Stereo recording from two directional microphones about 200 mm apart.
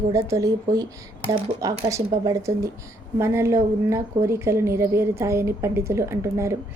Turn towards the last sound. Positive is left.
turn(degrees=-15)  # may be behind; listen again after turning